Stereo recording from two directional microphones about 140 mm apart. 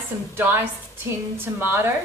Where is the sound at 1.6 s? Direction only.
15° right (ahead or behind).